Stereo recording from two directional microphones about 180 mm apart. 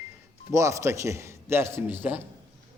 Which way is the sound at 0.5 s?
15° right (ahead or behind).